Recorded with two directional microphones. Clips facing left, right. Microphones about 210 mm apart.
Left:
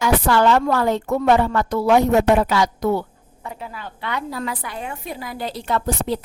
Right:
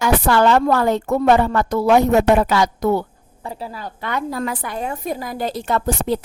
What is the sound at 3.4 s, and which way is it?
Speech, 35° right (ahead or behind).